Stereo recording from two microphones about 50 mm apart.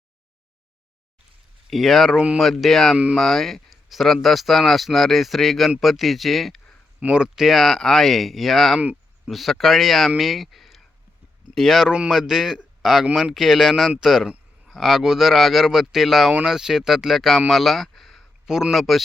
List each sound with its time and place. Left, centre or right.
1.7 s speech: centre
2.1 s speech: right
2.4 s speech: centre
7.1 s speech: centre
7.4 s speech: centre
11.9 s speech: centre
12.1 s speech: centre
17.5 s a sound: centre
18.4 s speech: centre
18.7 s speech: centre